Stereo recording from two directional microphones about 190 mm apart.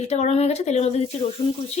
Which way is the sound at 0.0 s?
35° left (ahead or behind).